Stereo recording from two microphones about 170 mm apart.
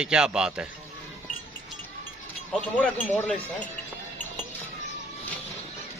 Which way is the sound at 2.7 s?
10° left (ahead or behind).